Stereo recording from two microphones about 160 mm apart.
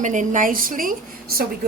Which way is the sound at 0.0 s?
50° right (ahead or behind).